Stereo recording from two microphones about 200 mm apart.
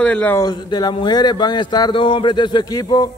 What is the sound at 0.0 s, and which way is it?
A man's voice, 5° left (ahead or behind).